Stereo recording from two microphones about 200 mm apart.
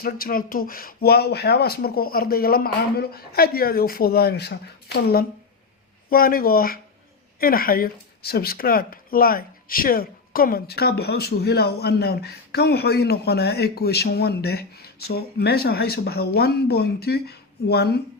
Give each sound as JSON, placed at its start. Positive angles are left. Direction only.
{"t": 0.0, "sound": "speech", "side_deg": 45}